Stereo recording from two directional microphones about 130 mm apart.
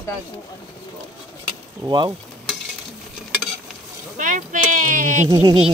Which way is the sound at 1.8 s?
35° right (ahead or behind).